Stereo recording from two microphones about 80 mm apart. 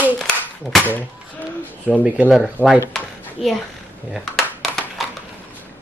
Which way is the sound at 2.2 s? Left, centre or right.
Centre.